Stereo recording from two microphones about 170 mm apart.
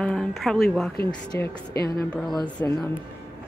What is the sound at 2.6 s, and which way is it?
Speech, 10° left (ahead or behind).